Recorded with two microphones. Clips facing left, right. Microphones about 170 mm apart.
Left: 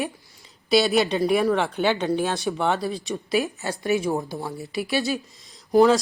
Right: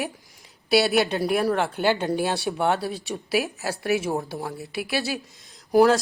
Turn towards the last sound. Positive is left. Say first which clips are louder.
# left 1 dB
turn(degrees=-5)  # may be behind; listen again after turning